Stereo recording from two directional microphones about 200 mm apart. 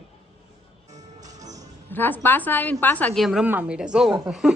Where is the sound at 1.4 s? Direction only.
35° right (ahead or behind).